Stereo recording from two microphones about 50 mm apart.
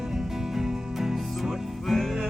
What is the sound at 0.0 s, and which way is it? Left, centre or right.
Music, centre.